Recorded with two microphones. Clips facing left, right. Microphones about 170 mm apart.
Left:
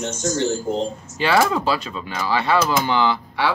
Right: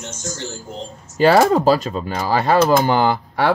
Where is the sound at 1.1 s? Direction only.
40° right (ahead or behind).